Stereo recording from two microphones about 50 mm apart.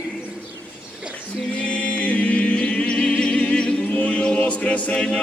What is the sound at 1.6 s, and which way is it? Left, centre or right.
A capella, left.